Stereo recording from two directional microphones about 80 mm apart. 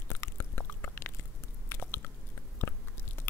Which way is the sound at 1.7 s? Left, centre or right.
Left.